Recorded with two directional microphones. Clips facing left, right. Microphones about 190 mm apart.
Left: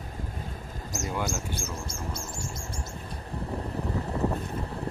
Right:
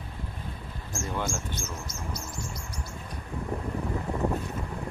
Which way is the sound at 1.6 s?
30° left (ahead or behind).